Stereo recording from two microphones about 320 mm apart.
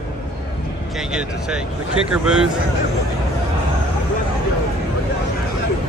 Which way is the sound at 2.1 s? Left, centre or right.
Centre.